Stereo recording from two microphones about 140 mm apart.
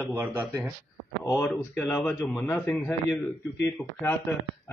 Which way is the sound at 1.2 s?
15° left (ahead or behind).